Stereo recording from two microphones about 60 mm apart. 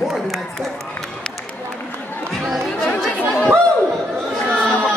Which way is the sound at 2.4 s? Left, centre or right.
Centre.